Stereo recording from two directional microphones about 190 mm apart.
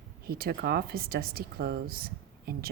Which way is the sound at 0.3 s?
55° right (ahead or behind).